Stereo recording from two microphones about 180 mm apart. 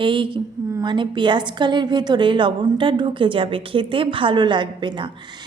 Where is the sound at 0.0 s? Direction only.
25° right (ahead or behind).